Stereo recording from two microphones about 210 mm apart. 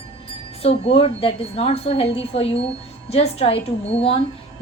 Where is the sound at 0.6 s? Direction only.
30° left (ahead or behind).